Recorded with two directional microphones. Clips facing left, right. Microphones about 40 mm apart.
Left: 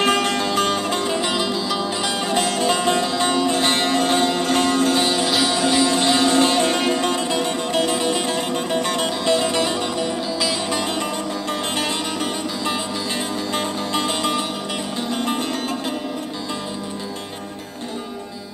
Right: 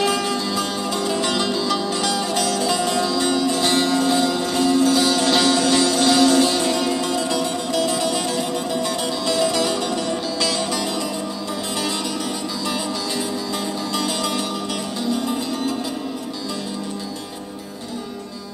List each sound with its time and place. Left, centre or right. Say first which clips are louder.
0.0 s music: left 2 dB; left
1.2 s music: right 1 dB; centre
2.1 s music: left 1 dB; left
4.9 s music: right 1 dB; left
5.3 s music: right 2 dB; centre
10.7 s music: left 1 dB; left
11.4 s music: left 2 dB; left
15.0 s music: even; left